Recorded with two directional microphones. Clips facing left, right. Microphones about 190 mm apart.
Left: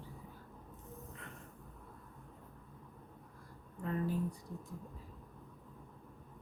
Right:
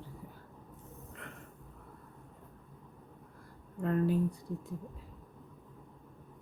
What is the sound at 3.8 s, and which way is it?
Speech, 65° right (ahead or behind).